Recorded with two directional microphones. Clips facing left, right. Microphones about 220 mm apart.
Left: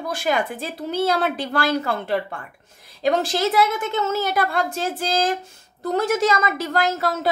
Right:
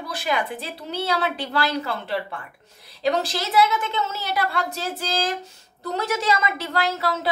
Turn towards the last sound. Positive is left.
turn(degrees=50)  # may be behind; listen again after turning